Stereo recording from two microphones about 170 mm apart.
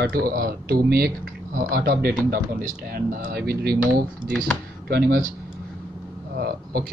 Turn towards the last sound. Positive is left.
turn(degrees=-65)  # may be behind; listen again after turning